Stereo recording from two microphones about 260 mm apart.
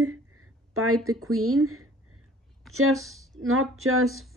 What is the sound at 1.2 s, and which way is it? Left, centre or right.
Speech, right.